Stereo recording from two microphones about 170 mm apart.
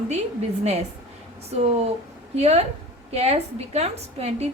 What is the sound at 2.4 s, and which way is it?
A woman's voice, 40° right (ahead or behind).